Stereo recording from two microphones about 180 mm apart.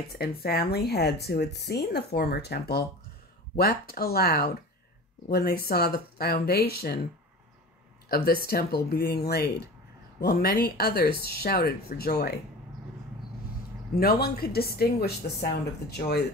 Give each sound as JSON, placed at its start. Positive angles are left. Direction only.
{"t": 0.1, "sound": "speech", "side_deg": 60}
{"t": 8.5, "sound": "speech", "side_deg": 60}
{"t": 13.9, "sound": "speech", "side_deg": 55}